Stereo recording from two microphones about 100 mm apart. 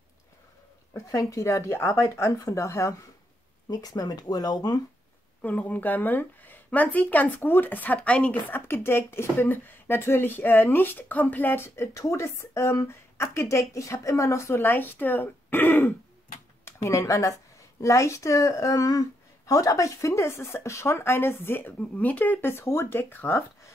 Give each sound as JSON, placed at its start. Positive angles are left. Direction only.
{"t": 0.9, "sound": "speech", "side_deg": 30}
{"t": 5.4, "sound": "speech", "side_deg": 15}
{"t": 16.6, "sound": "speech", "side_deg": 30}